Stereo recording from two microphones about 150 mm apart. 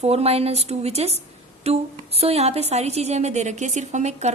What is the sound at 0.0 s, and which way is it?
A woman's voice, 45° right (ahead or behind).